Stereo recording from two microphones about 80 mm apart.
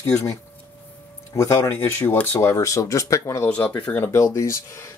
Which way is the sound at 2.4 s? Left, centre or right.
Left.